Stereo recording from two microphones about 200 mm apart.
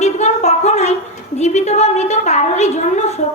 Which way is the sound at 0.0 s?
35° left (ahead or behind).